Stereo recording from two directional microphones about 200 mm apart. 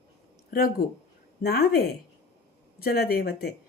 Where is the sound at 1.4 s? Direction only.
55° left (ahead or behind).